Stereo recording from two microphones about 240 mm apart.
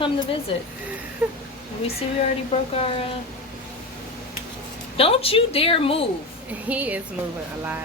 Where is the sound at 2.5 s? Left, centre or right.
Left.